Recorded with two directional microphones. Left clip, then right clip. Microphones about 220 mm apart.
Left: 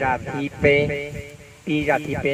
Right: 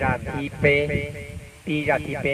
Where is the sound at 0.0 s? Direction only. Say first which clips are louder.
Left 2 dB; 35° left (ahead or behind).